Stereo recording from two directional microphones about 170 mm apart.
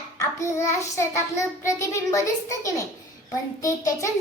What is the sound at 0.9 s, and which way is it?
A child's voice, 15° left (ahead or behind).